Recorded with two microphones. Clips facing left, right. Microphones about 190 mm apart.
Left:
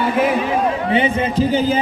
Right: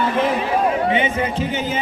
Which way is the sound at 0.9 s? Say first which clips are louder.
Left 2 dB; 35° left (ahead or behind).